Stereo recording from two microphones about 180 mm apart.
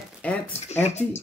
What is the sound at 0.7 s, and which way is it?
Speech, 40° left (ahead or behind).